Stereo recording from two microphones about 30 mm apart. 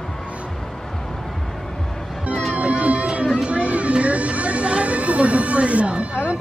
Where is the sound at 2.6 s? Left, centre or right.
Right.